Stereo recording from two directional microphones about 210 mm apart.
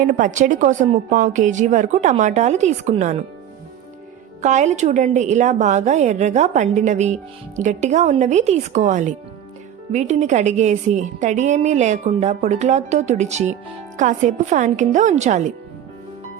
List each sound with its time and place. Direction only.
0.0 s a woman's voice: 40° right (ahead or behind)
4.4 s a woman's voice: 35° right (ahead or behind)